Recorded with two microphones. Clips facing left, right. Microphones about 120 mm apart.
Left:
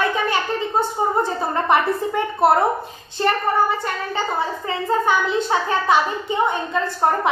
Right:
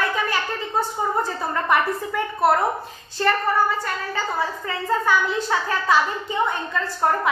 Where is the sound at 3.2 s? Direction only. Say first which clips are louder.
Left 1 dB; 20° left (ahead or behind).